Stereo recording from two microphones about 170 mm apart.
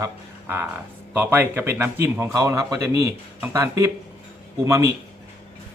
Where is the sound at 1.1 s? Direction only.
15° right (ahead or behind).